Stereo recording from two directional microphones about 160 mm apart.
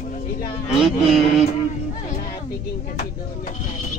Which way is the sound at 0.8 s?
5° right (ahead or behind).